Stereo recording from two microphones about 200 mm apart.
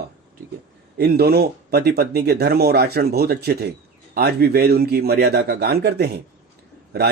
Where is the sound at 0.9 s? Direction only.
50° right (ahead or behind).